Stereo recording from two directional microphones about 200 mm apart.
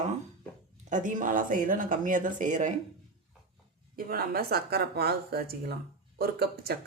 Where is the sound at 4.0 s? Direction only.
45° right (ahead or behind).